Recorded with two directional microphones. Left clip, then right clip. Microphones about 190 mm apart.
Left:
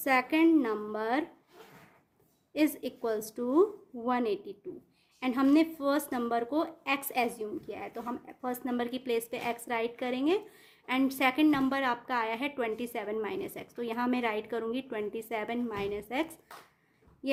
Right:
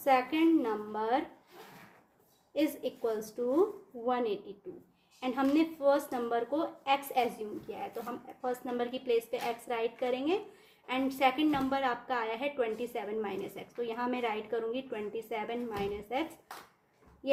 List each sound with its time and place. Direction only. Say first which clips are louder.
0.0 s a woman's voice: left 1 dB; 45° left (ahead or behind)
2.5 s a woman's voice: left 2 dB; 45° left (ahead or behind)
8.4 s a woman's voice: right 1 dB; 45° left (ahead or behind)